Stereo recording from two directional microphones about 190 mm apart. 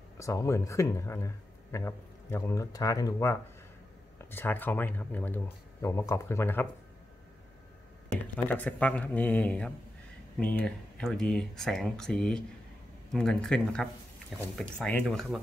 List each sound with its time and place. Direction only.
0.2 s speech: 15° left (ahead or behind)
8.5 s speech: 10° left (ahead or behind)